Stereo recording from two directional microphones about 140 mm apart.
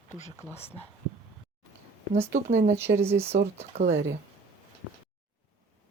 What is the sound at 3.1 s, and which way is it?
Speech, 50° right (ahead or behind).